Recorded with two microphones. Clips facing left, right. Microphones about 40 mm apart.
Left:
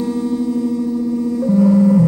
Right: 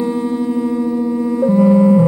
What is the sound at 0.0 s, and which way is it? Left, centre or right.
Music, right.